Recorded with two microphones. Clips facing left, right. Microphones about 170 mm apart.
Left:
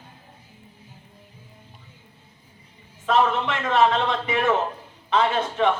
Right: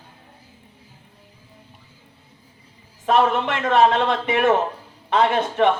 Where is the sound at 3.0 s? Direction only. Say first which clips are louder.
Right 3 dB; 60° right (ahead or behind).